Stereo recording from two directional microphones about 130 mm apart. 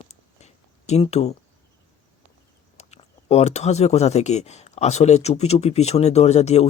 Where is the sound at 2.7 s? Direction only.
55° left (ahead or behind).